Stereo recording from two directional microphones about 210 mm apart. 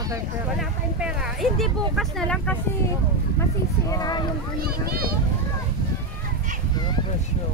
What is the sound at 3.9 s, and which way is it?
Speech, 20° left (ahead or behind).